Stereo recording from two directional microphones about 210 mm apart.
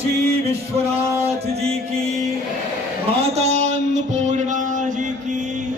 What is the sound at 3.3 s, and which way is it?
Music, 30° right (ahead or behind).